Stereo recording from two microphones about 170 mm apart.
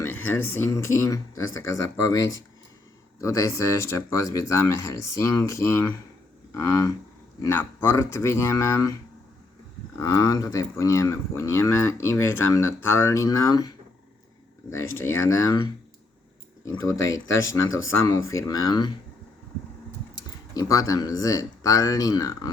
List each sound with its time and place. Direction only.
0.0 s speech: 10° left (ahead or behind)
10.0 s speech: 20° left (ahead or behind)
20.5 s speech: 20° left (ahead or behind)